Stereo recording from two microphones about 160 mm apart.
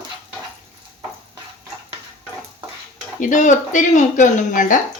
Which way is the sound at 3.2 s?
50° left (ahead or behind).